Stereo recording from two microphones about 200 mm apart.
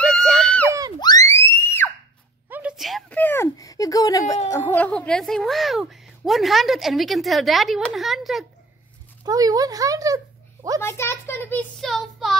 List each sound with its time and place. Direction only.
0.0 s a sound: centre (ahead or behind)
0.7 s screaming: 15° right (ahead or behind)
0.9 s music: 20° left (ahead or behind)
2.5 s a sound: 5° right (ahead or behind); by 4.4 s 15° left (ahead or behind)
4.5 s a woman's voice: 10° left (ahead or behind)
9.2 s speech: 20° right (ahead or behind)
10.8 s speech: 10° left (ahead or behind)